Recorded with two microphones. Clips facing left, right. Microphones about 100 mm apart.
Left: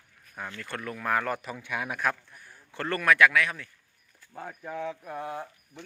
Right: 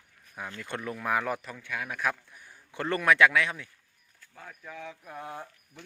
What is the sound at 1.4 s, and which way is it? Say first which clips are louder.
Speech: left 3 dB; 15° left (ahead or behind).